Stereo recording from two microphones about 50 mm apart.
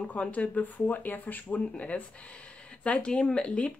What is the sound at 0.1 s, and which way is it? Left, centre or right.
Speech, left.